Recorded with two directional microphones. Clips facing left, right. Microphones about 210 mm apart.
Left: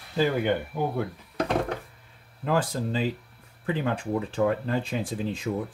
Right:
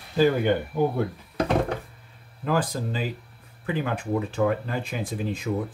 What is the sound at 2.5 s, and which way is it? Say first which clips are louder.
Speech: even; 25° left (ahead or behind).